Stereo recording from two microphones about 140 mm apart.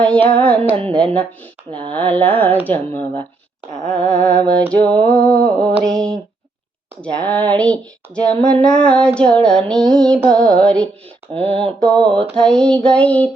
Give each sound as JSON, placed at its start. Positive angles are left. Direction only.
{"t": 0.0, "sound": "female singing", "side_deg": 10}
{"t": 3.8, "sound": "a sound", "side_deg": 5}
{"t": 5.0, "sound": "female singing", "side_deg": 10}
{"t": 5.8, "sound": "a sound", "side_deg": 5}
{"t": 7.0, "sound": "female singing", "side_deg": 10}
{"t": 11.3, "sound": "mantra", "side_deg": -45}
{"t": 11.8, "sound": "female singing", "side_deg": 5}